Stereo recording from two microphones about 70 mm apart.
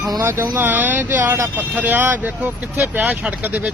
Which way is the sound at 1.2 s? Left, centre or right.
Right.